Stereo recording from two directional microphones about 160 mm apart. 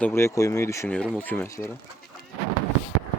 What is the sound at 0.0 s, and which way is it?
Speech, 15° left (ahead or behind).